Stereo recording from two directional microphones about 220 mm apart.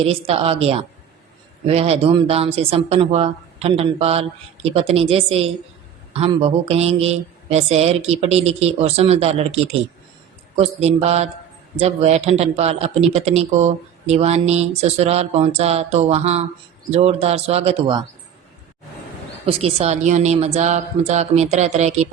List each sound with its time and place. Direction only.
0.0 s speech: 25° right (ahead or behind)
10.6 s speech: 30° right (ahead or behind)
19.5 s speech: 25° right (ahead or behind)